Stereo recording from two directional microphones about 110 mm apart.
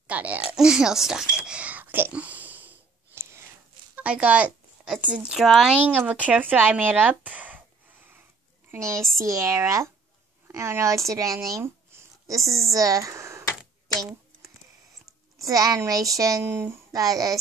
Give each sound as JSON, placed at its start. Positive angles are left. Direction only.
{"t": 0.0, "sound": "speech", "side_deg": -15}
{"t": 3.9, "sound": "a woman's voice", "side_deg": -10}
{"t": 8.7, "sound": "speech", "side_deg": -25}
{"t": 13.9, "sound": "a sound", "side_deg": -35}
{"t": 15.3, "sound": "speech", "side_deg": -30}